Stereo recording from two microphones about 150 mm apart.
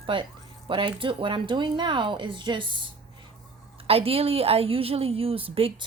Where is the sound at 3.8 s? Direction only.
40° right (ahead or behind).